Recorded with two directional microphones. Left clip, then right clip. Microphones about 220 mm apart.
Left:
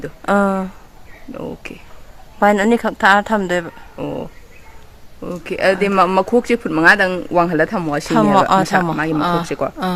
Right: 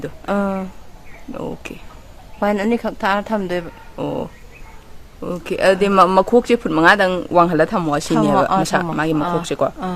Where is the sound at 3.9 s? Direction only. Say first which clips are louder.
Right 2 dB; 15° right (ahead or behind).